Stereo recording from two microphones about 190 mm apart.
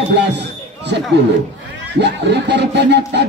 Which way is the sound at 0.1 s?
65° right (ahead or behind).